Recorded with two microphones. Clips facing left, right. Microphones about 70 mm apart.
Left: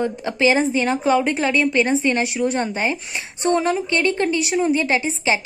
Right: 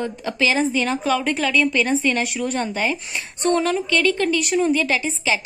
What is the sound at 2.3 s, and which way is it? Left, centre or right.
Speech, centre.